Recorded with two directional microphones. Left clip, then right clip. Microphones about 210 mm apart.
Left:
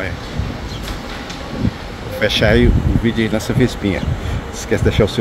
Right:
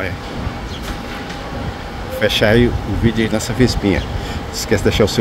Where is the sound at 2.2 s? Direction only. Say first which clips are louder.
Right 1 dB; 5° right (ahead or behind).